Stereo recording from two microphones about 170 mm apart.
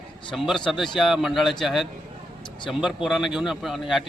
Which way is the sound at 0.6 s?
Centre (ahead or behind).